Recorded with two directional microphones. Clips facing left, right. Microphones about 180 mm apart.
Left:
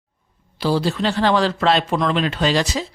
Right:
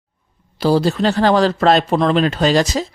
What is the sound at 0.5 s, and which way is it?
Speech, 45° right (ahead or behind).